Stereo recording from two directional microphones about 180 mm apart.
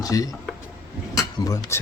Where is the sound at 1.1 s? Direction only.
20° left (ahead or behind).